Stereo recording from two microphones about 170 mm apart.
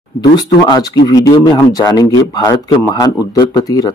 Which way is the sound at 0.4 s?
25° left (ahead or behind).